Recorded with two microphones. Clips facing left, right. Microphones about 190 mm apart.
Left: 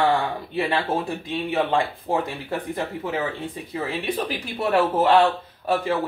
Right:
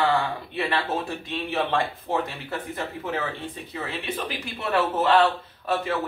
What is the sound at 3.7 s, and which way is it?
Speech, 35° left (ahead or behind).